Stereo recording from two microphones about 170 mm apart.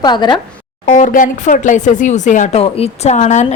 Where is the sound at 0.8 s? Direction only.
45° left (ahead or behind).